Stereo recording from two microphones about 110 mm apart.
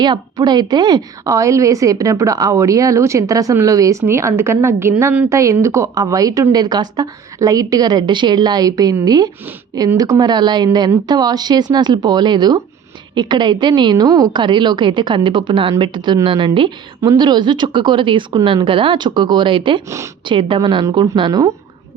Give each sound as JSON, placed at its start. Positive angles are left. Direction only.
{"t": 0.0, "sound": "a woman's voice", "side_deg": -40}
{"t": 17.0, "sound": "a woman's voice", "side_deg": -35}